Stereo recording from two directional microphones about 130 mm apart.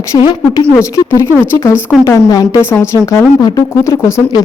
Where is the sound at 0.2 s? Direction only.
35° left (ahead or behind).